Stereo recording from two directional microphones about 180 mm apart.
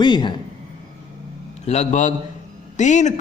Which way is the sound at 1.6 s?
40° left (ahead or behind).